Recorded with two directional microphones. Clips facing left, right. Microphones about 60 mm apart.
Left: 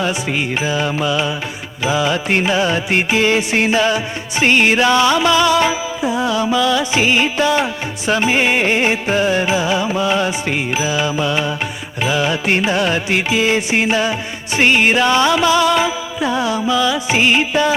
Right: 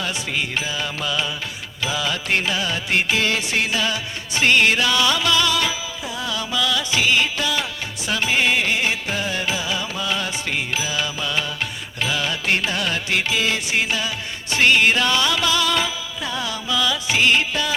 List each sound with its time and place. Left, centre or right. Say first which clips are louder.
0.0 s music: left 6 dB; left